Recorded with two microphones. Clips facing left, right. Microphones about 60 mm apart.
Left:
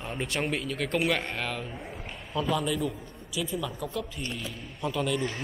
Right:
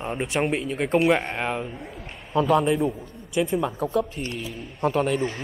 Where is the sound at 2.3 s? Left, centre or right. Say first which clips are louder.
Right 8 dB; right.